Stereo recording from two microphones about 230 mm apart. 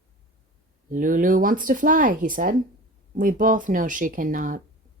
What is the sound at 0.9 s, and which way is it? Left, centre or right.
Speech, right.